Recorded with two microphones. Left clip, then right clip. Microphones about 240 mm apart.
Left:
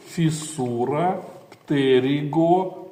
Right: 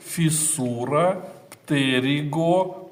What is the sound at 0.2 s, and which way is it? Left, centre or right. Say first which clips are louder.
Speech: even; right.